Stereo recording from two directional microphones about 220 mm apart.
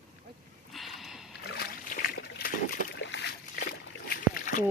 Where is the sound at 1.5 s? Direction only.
45° left (ahead or behind).